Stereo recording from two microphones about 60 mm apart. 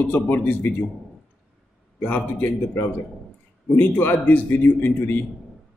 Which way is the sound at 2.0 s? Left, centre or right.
Centre.